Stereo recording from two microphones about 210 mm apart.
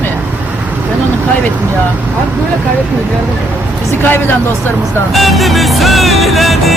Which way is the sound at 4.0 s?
10° left (ahead or behind).